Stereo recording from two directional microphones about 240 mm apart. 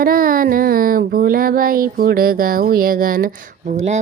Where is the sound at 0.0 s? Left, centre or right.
Right.